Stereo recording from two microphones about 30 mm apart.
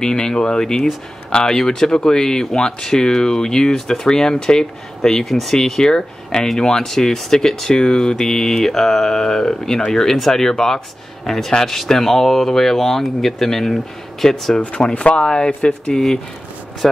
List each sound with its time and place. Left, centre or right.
0.0 s speech: left
5.2 s speech: centre
5.6 s speech: centre
6.8 s speech: centre
15.0 s speech: left
16.8 s speech: centre